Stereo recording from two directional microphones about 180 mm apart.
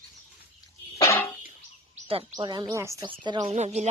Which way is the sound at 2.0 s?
30° right (ahead or behind).